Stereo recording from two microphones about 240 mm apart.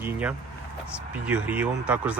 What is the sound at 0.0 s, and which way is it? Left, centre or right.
Speech, centre.